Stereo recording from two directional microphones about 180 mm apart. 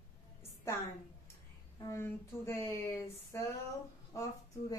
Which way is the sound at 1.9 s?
15° left (ahead or behind).